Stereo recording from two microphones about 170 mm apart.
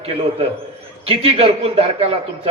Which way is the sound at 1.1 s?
35° right (ahead or behind).